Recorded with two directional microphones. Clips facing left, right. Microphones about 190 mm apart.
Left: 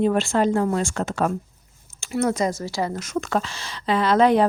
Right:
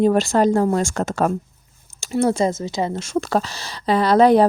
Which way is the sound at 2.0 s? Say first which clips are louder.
Right 4 dB; 30° right (ahead or behind).